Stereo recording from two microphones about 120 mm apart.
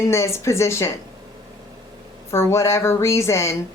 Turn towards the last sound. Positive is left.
turn(degrees=25)  # may be behind; listen again after turning